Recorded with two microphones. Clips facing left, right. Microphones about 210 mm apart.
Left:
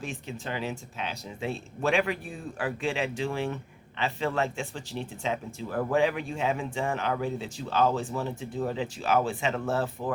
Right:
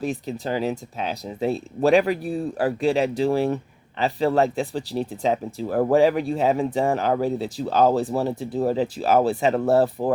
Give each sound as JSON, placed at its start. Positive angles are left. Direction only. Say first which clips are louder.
{"t": 0.0, "sound": "speech", "louder": "right 9 dB", "side_deg": -35}